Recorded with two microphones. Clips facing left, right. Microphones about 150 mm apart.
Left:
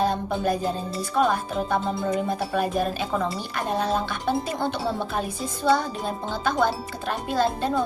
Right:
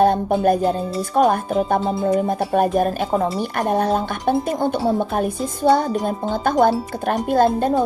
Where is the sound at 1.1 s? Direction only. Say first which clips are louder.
Right 6 dB; 45° right (ahead or behind).